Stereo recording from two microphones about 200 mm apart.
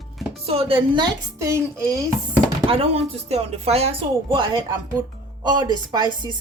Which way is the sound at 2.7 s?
30° right (ahead or behind).